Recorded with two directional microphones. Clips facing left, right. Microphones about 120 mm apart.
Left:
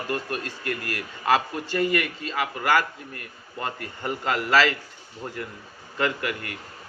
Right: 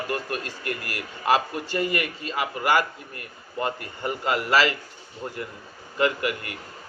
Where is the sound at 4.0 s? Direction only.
25° right (ahead or behind).